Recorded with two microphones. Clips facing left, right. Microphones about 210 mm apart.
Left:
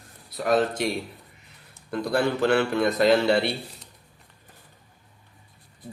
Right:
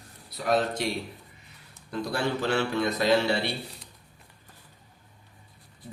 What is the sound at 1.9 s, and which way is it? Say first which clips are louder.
Speech: left 5 dB; 55° left (ahead or behind).